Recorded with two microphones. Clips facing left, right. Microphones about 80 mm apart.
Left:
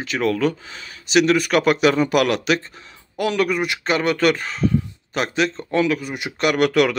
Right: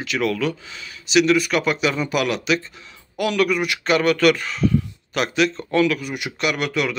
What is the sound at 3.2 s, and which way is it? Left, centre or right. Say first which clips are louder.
A man's voice: even; left.